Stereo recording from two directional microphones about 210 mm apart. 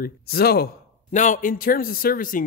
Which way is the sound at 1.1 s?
35° left (ahead or behind).